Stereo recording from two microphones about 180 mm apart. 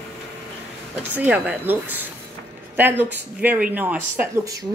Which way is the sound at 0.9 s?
10° right (ahead or behind).